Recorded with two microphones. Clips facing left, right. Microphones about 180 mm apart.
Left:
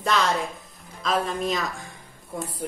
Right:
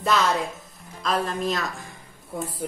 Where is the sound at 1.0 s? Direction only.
Centre (ahead or behind).